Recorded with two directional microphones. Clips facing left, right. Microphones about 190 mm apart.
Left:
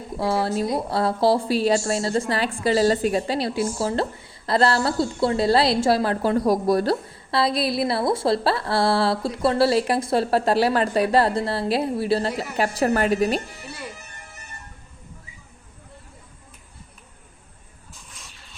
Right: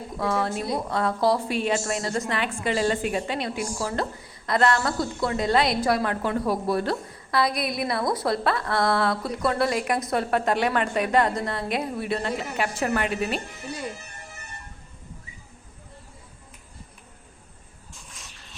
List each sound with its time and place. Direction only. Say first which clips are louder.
0.2 s a woman's voice: left 4 dB; 30° left (ahead or behind)